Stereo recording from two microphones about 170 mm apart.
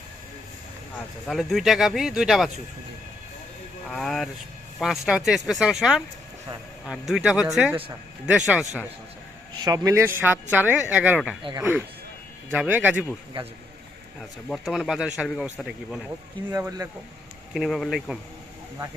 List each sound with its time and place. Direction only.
1.3 s speech: centre (ahead or behind)
3.8 s speech: centre (ahead or behind)
9.6 s speech: 20° right (ahead or behind)
11.4 s speech: 30° right (ahead or behind)
12.5 s speech: 10° right (ahead or behind)
14.5 s speech: centre (ahead or behind)
16.5 s speech: 20° right (ahead or behind)
17.5 s speech: centre (ahead or behind)